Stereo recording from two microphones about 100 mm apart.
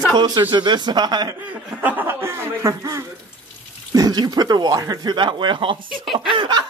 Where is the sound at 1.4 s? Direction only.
15° right (ahead or behind); by 6.7 s 50° right (ahead or behind).